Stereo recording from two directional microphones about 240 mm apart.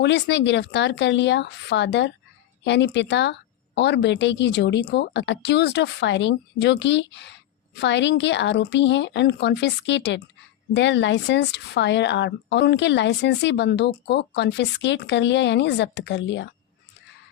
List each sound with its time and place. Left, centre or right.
0.0 s a woman's voice: left